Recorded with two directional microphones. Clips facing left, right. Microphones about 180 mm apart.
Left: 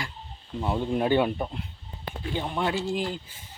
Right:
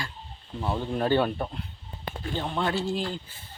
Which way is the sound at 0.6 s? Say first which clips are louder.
Left 2 dB; 15° left (ahead or behind).